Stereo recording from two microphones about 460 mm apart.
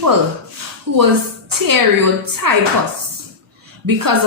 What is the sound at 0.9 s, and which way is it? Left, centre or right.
Speech, right.